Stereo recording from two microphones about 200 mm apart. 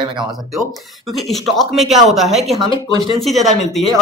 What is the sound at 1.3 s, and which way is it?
Speech, centre (ahead or behind).